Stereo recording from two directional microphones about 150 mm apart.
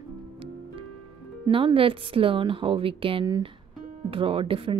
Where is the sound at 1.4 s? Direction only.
35° right (ahead or behind).